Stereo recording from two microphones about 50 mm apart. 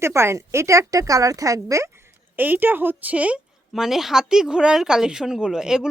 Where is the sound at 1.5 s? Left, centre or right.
Right.